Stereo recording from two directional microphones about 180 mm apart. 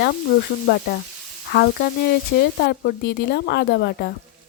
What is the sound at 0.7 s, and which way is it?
A woman's voice, 60° left (ahead or behind).